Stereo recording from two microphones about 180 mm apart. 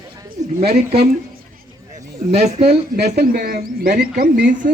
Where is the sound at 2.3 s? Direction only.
35° right (ahead or behind).